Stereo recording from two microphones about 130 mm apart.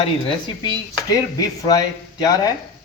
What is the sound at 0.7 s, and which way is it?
Speech, 30° left (ahead or behind).